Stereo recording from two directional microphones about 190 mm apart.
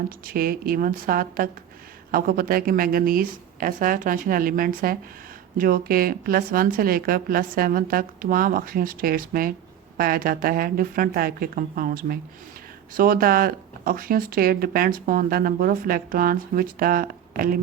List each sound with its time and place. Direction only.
0.3 s speech: 50° right (ahead or behind)